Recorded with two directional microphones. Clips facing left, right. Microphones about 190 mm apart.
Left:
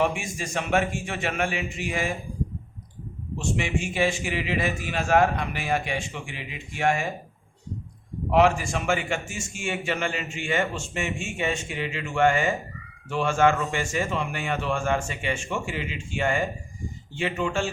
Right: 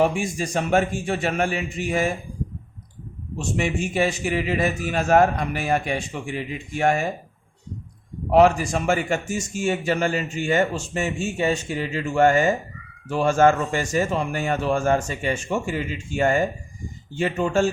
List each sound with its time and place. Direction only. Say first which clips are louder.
0.0 s a man's voice: right 5 dB; 35° right (ahead or behind)
3.3 s a man's voice: right 3 dB; 40° right (ahead or behind)
8.3 s a man's voice: right 4 dB; 40° right (ahead or behind)